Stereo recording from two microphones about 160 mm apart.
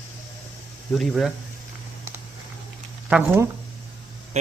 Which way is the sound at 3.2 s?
15° right (ahead or behind).